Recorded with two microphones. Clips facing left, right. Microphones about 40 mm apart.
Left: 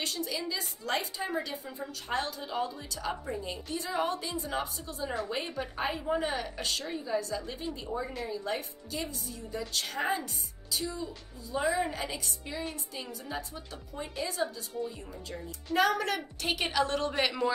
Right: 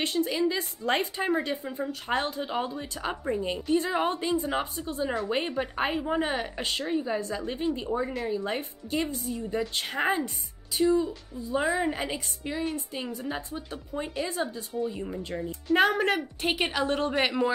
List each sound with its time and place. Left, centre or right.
0.0 s a woman's voice: right
14.7 s a woman's voice: centre
15.0 s a woman's voice: right; by 17.5 s centre